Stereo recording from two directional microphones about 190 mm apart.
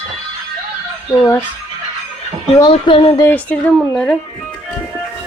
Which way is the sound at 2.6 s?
25° left (ahead or behind).